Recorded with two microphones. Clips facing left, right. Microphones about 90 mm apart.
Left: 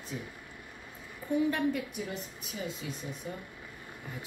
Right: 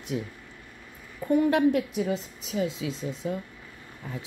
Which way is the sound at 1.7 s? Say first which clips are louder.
Right 9 dB; 90° right.